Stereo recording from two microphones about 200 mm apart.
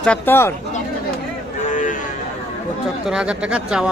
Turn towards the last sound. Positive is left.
turn(degrees=-5)  # may be behind; listen again after turning